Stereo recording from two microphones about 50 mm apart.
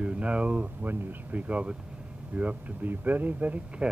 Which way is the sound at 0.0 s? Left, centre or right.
Right.